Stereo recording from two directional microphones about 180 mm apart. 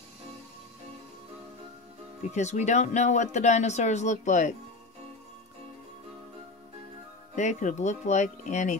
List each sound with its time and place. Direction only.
2.3 s speech: 40° left (ahead or behind)
7.3 s speech: 40° left (ahead or behind)